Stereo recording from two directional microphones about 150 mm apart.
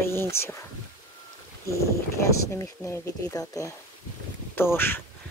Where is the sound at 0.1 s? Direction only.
15° left (ahead or behind).